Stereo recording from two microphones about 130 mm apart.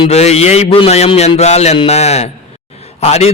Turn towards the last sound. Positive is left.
turn(degrees=55)  # may be behind; listen again after turning